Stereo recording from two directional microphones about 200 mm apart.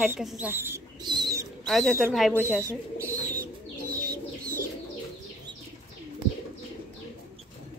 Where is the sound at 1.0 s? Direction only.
20° right (ahead or behind).